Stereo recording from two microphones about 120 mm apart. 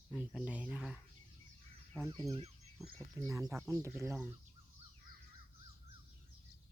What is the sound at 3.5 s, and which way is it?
Speech, 10° right (ahead or behind).